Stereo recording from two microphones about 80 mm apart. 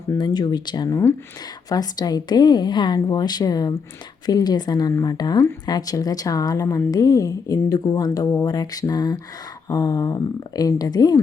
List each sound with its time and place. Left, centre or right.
0.2 s a woman's voice: left
1.7 s a woman's voice: left